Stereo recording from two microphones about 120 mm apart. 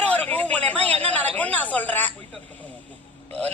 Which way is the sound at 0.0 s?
10° left (ahead or behind).